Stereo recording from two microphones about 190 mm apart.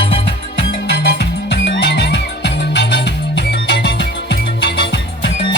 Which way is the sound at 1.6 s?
70° left (ahead or behind).